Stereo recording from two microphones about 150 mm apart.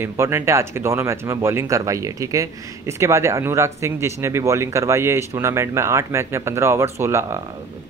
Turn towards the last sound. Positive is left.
turn(degrees=-20)  # may be behind; listen again after turning